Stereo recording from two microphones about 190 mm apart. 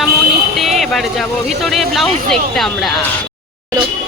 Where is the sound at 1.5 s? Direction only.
Centre (ahead or behind).